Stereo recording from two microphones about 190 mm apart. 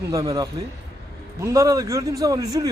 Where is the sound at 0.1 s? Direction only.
20° right (ahead or behind).